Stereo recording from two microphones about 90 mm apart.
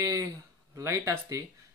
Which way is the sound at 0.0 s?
40° right (ahead or behind).